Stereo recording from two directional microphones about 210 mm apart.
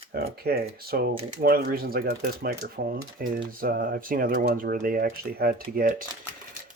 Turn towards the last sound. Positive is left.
turn(degrees=-45)  # may be behind; listen again after turning